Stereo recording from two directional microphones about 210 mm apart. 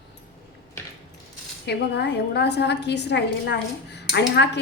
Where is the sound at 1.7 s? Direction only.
55° left (ahead or behind).